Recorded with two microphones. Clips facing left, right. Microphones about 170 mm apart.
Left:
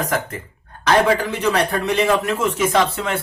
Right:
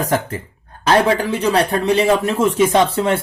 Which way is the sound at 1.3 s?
35° right (ahead or behind).